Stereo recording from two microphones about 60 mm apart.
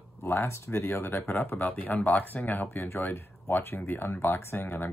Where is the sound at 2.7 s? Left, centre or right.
Left.